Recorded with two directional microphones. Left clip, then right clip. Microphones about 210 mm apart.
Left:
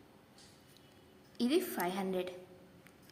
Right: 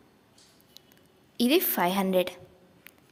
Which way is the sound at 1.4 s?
45° right (ahead or behind).